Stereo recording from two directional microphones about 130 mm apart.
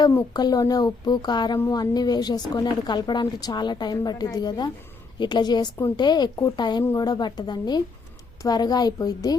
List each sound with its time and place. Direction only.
0.3 s a woman's voice: 30° left (ahead or behind)